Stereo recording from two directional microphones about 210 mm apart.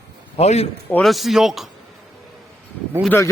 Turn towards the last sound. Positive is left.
turn(degrees=10)  # may be behind; listen again after turning